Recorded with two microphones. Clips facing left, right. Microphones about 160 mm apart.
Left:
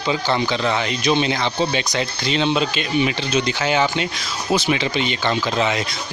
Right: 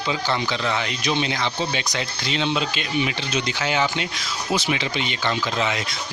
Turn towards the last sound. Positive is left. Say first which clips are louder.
# left 4 dB
turn(degrees=35)  # may be behind; listen again after turning